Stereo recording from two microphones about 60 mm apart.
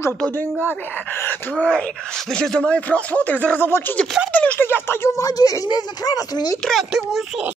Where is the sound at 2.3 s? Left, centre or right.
Centre.